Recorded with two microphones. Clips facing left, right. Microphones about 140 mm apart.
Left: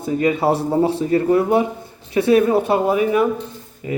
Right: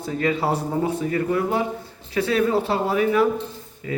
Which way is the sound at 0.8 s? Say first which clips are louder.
Left 6 dB; 30° left (ahead or behind).